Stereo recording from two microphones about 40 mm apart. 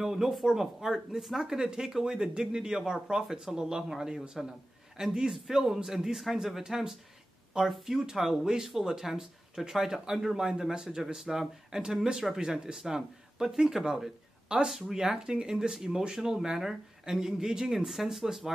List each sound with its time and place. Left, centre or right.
0.0 s a man's voice: centre